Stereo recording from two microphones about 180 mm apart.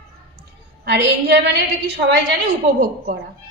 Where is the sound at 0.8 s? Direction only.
70° right (ahead or behind).